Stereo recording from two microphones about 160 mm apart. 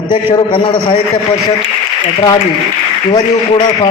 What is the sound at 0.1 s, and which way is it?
Speech, 30° left (ahead or behind).